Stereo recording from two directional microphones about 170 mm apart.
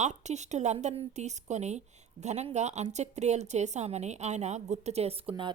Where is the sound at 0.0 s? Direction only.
40° right (ahead or behind).